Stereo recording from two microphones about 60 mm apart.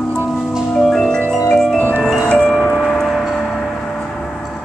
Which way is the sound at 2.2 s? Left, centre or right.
Centre.